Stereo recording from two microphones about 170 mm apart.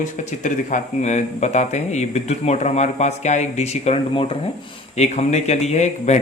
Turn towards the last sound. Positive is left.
turn(degrees=40)  # may be behind; listen again after turning